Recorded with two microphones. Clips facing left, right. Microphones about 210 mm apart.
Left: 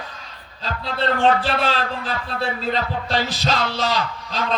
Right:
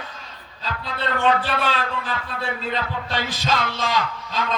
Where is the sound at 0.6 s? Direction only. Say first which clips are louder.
Left 4 dB; 40° left (ahead or behind).